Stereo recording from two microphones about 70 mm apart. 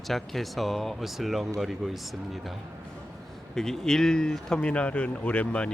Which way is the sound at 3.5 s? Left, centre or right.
Centre.